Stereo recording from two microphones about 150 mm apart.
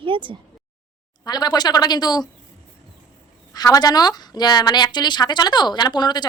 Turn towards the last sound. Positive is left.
turn(degrees=30)  # may be behind; listen again after turning